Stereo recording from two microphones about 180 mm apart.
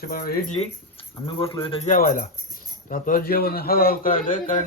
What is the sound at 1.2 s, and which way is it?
Speech, 30° left (ahead or behind).